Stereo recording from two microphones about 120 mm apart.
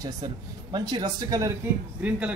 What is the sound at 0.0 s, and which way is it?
Speech, 35° right (ahead or behind).